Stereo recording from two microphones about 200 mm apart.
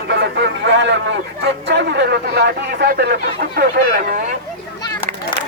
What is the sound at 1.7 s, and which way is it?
Speech, 60° right (ahead or behind).